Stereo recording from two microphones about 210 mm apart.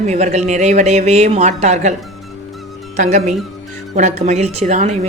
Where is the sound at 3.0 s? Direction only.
35° right (ahead or behind).